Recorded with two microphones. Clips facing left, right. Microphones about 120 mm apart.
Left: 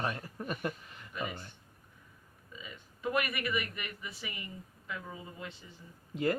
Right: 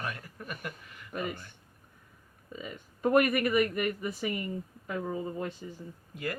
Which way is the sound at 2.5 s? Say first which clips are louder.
Right 8 dB; 50° right (ahead or behind).